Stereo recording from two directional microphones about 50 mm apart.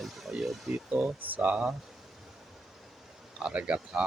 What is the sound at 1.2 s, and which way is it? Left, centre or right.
Speech, right.